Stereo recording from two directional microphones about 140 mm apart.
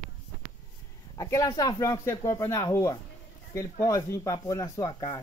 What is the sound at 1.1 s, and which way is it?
Speech, 25° left (ahead or behind).